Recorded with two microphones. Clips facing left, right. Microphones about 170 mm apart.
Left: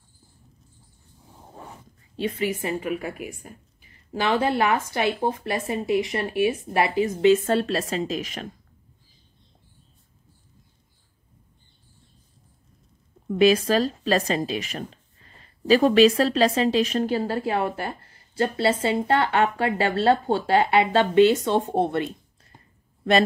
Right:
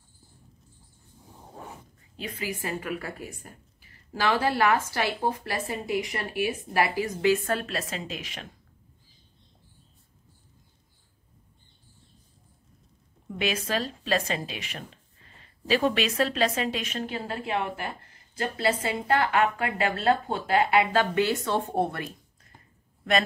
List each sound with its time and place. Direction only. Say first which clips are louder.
1.4 s a sound: even; centre (ahead or behind)
2.1 s a woman's voice: left 8 dB; 30° left (ahead or behind)
13.4 s a woman's voice: left 10 dB; 35° left (ahead or behind)